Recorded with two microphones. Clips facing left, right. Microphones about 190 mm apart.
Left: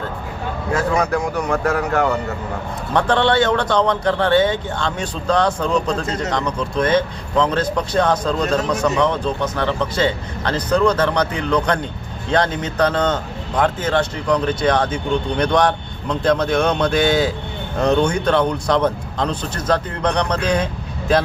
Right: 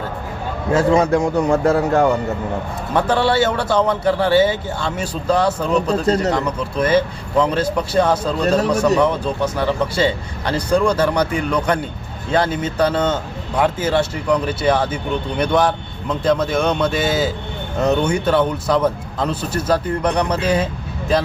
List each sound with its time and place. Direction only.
0.7 s a man's voice: 25° right (ahead or behind)
2.9 s speech: 5° right (ahead or behind)